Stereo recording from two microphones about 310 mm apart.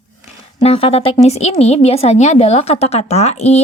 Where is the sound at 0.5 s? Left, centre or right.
Centre.